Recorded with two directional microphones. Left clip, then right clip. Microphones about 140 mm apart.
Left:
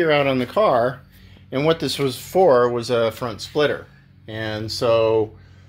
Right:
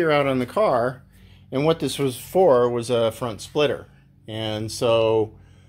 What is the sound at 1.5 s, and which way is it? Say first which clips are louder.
Speech: left 2 dB; 15° right (ahead or behind).